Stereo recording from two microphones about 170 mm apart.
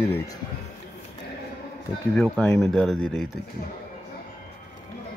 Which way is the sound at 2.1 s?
5° left (ahead or behind).